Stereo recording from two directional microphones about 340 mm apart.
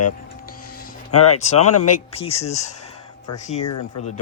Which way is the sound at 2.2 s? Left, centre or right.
Centre.